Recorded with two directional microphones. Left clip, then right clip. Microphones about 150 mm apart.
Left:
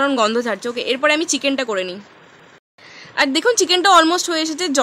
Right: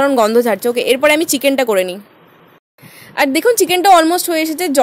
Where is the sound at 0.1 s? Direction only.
30° right (ahead or behind).